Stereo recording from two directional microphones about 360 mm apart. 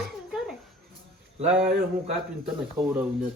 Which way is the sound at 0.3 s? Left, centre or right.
Centre.